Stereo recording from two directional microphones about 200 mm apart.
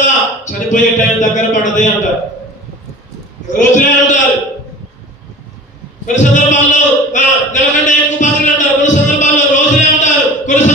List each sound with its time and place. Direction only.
0.0 s a sound: 40° left (ahead or behind)
3.4 s a man's voice: 40° left (ahead or behind)
6.1 s speech: 40° left (ahead or behind)